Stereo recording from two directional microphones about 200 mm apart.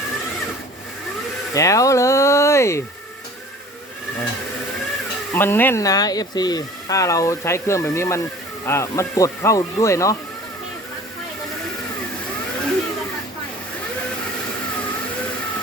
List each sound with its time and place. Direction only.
1.5 s speech: 15° left (ahead or behind)
5.3 s speech: 10° left (ahead or behind)